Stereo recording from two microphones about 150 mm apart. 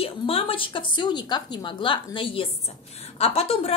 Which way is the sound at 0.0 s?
40° left (ahead or behind).